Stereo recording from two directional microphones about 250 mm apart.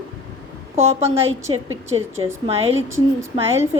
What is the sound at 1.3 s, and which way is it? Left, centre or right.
Speech, right.